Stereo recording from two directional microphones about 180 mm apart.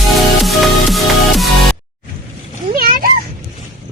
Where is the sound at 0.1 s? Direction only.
Centre (ahead or behind).